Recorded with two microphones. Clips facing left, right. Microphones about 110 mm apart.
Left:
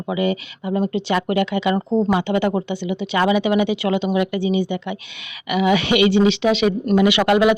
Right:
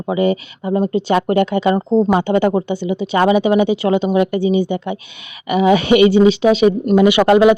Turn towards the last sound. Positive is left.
turn(degrees=-30)  # may be behind; listen again after turning